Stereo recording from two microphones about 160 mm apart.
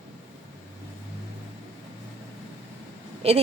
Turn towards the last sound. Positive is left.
turn(degrees=-40)  # may be behind; listen again after turning